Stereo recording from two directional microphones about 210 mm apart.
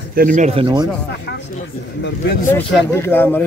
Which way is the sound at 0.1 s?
40° right (ahead or behind).